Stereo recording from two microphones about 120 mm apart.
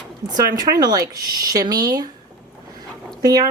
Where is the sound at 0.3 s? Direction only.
35° right (ahead or behind).